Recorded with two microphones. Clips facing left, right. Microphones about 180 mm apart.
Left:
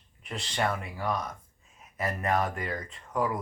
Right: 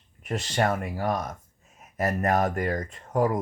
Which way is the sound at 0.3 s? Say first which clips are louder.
Right 5 dB; 45° right (ahead or behind).